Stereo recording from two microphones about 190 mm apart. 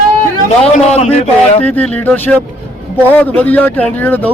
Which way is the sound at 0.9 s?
35° left (ahead or behind).